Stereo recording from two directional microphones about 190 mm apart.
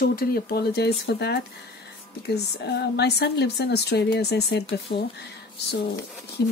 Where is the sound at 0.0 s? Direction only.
50° left (ahead or behind).